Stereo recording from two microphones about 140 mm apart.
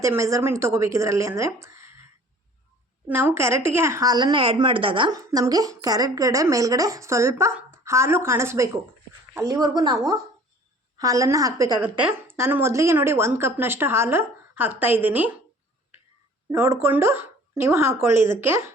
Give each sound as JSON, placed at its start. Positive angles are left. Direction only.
{"t": 0.0, "sound": "a woman's voice", "side_deg": -20}
{"t": 3.1, "sound": "a woman's voice", "side_deg": -15}
{"t": 5.1, "sound": "a woman's voice", "side_deg": -25}
{"t": 11.9, "sound": "a woman's voice", "side_deg": -15}
{"t": 16.5, "sound": "a woman's voice", "side_deg": -15}